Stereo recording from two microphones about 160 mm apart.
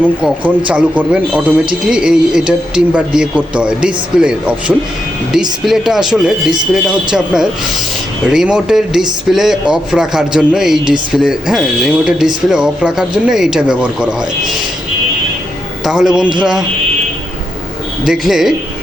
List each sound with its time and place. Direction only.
0.2 s speech: 5° right (ahead or behind)
15.8 s speech: 5° right (ahead or behind)
18.0 s speech: 5° right (ahead or behind)